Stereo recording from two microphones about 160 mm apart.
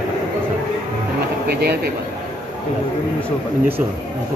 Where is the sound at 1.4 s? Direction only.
80° right.